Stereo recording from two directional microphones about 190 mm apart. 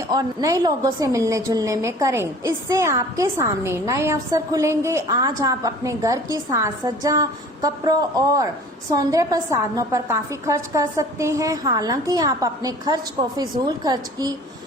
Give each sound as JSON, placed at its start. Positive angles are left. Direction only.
{"t": 0.1, "sound": "a woman's voice", "side_deg": -20}